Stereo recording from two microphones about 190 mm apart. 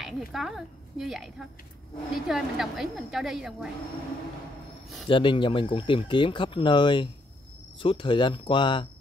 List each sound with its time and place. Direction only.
0.0 s a woman's voice: centre (ahead or behind)
5.0 s speech: 25° left (ahead or behind)